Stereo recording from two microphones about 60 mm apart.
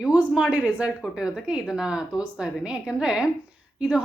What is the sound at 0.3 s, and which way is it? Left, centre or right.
Speech, centre.